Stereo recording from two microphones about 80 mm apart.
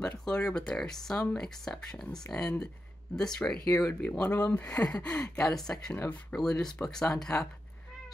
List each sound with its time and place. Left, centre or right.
0.0 s speech: centre
3.6 s speech: left
4.0 s speech: centre
4.3 s speech: left; by 7.4 s centre